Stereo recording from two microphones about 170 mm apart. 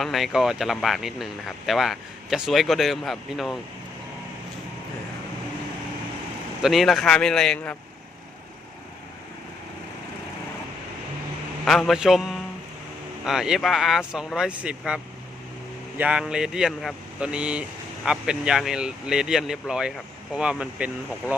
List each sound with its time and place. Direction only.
0.0 s speech: centre (ahead or behind)
6.6 s speech: centre (ahead or behind)
11.6 s speech: centre (ahead or behind)